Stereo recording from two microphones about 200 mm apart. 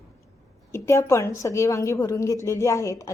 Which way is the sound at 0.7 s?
15° left (ahead or behind).